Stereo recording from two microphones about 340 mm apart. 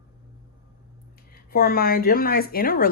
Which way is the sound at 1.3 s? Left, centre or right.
Left.